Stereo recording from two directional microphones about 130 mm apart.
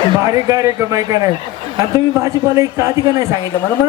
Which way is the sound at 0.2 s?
25° right (ahead or behind).